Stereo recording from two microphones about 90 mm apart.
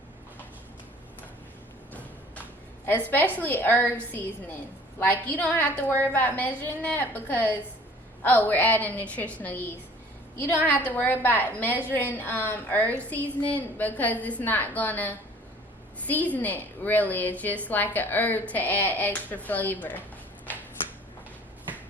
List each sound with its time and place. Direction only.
2.8 s a woman's voice: 20° left (ahead or behind)
4.9 s a woman's voice: 20° left (ahead or behind)
20.5 s finger snapping: 20° left (ahead or behind)